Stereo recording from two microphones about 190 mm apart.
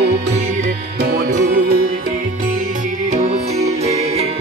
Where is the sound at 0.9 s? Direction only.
55° right (ahead or behind).